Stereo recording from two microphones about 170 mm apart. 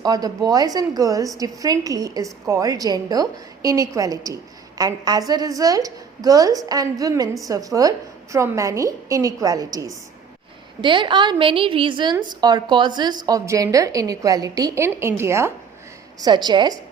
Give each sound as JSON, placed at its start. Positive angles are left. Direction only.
{"t": 0.0, "sound": "a woman's voice", "side_deg": -20}